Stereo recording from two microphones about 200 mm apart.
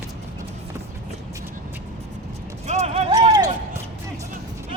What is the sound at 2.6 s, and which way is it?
Clip-clop, 35° right (ahead or behind).